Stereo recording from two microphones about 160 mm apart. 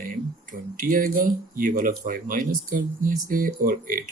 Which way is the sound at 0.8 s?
60° right (ahead or behind).